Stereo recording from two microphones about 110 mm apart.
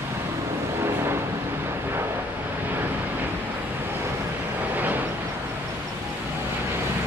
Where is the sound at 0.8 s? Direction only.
20° right (ahead or behind).